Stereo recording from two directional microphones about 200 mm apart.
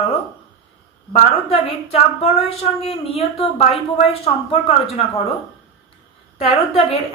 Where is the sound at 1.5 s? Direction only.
30° left (ahead or behind).